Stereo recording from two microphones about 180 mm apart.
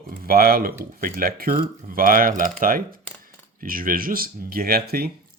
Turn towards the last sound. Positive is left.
turn(degrees=-60)  # may be behind; listen again after turning